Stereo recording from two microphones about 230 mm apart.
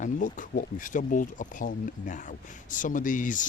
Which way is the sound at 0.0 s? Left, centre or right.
Left.